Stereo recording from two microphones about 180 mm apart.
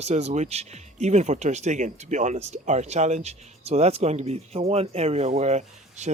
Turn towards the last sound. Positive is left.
turn(degrees=-40)  # may be behind; listen again after turning